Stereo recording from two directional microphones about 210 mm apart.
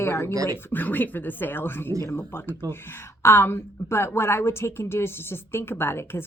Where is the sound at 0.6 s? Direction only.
10° left (ahead or behind).